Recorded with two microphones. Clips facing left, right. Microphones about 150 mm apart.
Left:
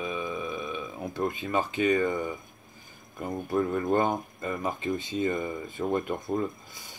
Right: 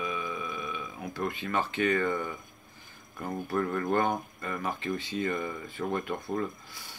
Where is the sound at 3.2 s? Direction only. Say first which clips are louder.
Left 3 dB; 20° left (ahead or behind).